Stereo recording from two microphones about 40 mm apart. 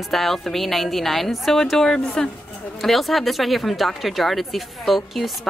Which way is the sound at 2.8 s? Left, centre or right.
Centre.